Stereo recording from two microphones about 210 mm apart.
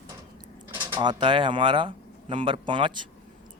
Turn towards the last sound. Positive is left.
turn(degrees=-20)  # may be behind; listen again after turning